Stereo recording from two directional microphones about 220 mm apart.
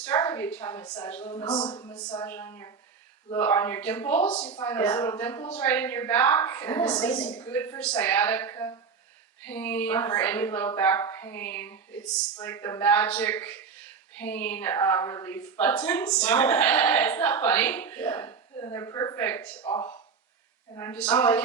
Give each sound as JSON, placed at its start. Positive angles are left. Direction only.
{"t": 0.0, "sound": "a woman's voice", "side_deg": 10}
{"t": 19.6, "sound": "a woman's voice", "side_deg": 20}
{"t": 20.7, "sound": "a woman's voice", "side_deg": 10}